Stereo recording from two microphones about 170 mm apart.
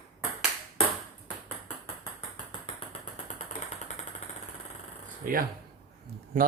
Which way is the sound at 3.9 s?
45° left (ahead or behind).